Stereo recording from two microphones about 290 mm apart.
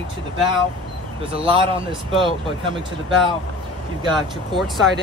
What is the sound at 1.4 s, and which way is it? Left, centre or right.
Speech, centre.